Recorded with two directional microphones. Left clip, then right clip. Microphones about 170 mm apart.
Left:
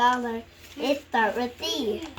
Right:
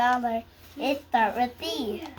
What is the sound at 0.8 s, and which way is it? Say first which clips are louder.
A child's voice: even; 10° right (ahead or behind).